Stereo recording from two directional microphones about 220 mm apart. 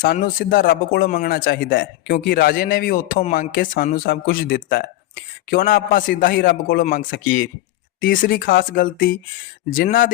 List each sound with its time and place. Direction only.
0.0 s speech: 40° left (ahead or behind)